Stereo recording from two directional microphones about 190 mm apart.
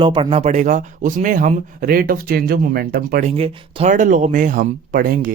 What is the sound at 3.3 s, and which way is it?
Speech, 30° right (ahead or behind).